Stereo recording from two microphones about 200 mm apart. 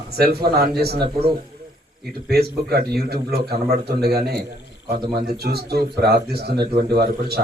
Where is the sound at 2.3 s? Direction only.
50° right (ahead or behind).